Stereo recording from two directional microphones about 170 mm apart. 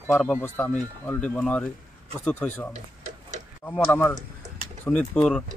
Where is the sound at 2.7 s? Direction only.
40° right (ahead or behind).